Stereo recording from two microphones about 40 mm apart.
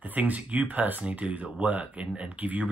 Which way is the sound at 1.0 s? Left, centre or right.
Right.